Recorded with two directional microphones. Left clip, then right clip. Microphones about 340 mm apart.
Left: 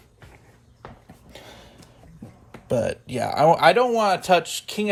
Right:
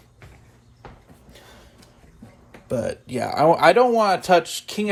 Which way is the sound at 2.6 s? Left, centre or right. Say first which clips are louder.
Left 2 dB; centre.